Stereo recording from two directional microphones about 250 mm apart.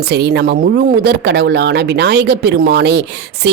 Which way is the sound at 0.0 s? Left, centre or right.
Right.